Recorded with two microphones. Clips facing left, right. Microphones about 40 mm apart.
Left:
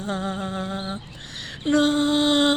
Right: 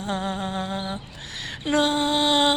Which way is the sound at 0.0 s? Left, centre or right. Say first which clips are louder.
Even; right.